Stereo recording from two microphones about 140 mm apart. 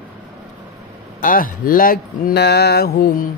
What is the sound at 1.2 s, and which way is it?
Mantra, 90° left.